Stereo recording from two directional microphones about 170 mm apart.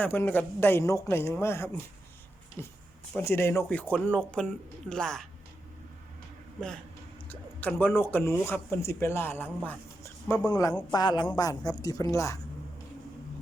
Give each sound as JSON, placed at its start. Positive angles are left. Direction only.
{"t": 0.0, "sound": "speech", "side_deg": 10}
{"t": 7.3, "sound": "a man's voice", "side_deg": 10}